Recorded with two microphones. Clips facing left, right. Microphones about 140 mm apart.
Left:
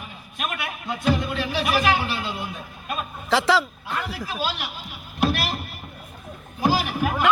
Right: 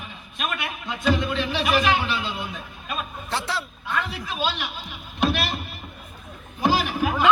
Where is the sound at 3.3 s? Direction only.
90° left.